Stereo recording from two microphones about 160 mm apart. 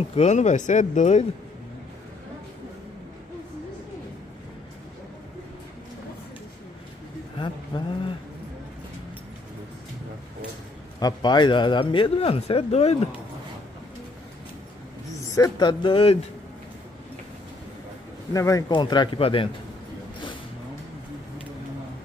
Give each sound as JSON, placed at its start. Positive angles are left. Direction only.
{"t": 0.1, "sound": "speech", "side_deg": 45}
{"t": 7.3, "sound": "vehicle", "side_deg": 30}
{"t": 11.0, "sound": "a man's voice", "side_deg": 25}
{"t": 15.1, "sound": "a man's voice", "side_deg": 20}
{"t": 15.8, "sound": "a man's voice", "side_deg": 35}
{"t": 18.3, "sound": "speech", "side_deg": 20}